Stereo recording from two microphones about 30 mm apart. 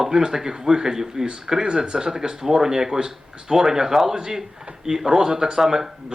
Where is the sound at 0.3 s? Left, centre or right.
Centre.